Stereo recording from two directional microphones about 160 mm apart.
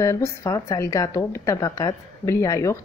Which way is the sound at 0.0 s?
20° left (ahead or behind).